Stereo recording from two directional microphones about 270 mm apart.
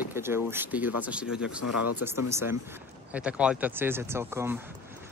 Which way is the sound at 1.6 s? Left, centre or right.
Left.